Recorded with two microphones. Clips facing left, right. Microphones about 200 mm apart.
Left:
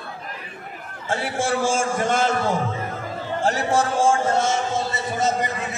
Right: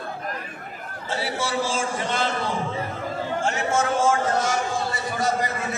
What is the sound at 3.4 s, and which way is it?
A man's voice, 35° left (ahead or behind).